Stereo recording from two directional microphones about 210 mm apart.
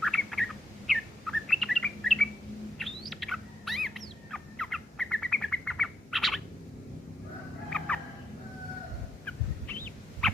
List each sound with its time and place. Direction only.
0.0 s bird: centre (ahead or behind)
7.7 s turkey: 5° left (ahead or behind)
9.2 s bird: 10° left (ahead or behind)